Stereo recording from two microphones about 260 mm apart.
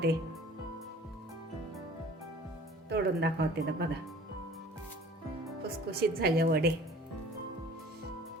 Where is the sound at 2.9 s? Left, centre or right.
Right.